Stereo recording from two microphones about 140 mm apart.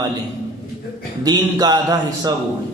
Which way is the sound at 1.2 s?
30° right (ahead or behind).